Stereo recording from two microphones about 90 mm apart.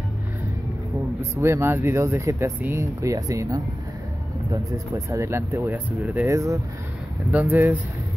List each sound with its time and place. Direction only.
1.3 s speech: 30° right (ahead or behind)
6.2 s speech: 35° right (ahead or behind)
7.2 s speech: 20° right (ahead or behind)